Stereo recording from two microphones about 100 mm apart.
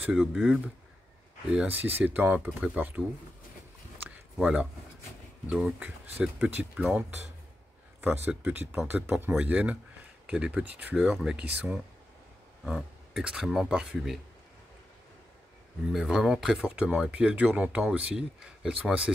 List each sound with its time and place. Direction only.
0.1 s speech: 5° right (ahead or behind)
1.7 s speech: 20° right (ahead or behind)
4.4 s speech: 10° right (ahead or behind)
8.3 s speech: 20° right (ahead or behind)
15.9 s speech: 5° right (ahead or behind)